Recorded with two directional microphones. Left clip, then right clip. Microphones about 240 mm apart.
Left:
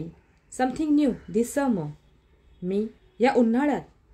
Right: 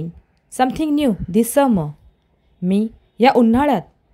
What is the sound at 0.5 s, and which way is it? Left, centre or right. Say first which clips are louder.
A woman's voice: right 7 dB; right.